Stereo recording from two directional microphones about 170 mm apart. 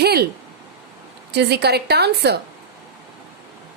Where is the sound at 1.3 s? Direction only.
75° right (ahead or behind).